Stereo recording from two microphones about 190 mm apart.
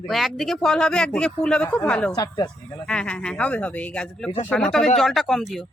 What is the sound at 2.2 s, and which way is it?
Speech, 20° left (ahead or behind).